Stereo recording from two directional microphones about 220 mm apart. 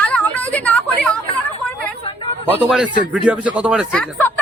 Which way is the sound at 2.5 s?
5° right (ahead or behind).